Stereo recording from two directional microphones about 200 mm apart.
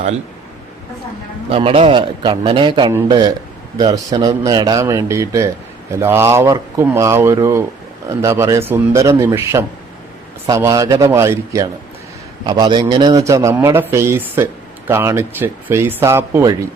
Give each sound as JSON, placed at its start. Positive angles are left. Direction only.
{"t": 1.5, "sound": "a man's voice", "side_deg": -30}